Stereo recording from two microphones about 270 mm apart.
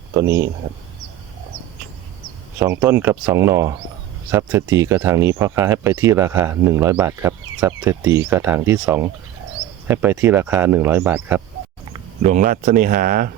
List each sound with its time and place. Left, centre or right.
2.6 s speech: centre
11.9 s speech: right